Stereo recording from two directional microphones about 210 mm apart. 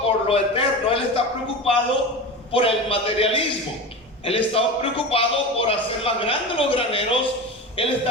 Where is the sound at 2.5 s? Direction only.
25° left (ahead or behind).